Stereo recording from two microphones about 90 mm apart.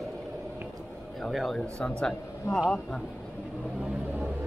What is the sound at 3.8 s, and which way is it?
Vehicle, 10° right (ahead or behind).